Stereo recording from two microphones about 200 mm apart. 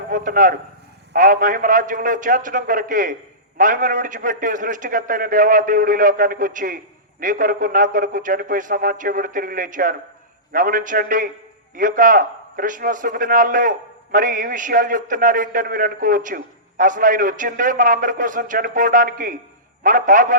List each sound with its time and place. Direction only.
0.1 s a man's voice: 40° right (ahead or behind)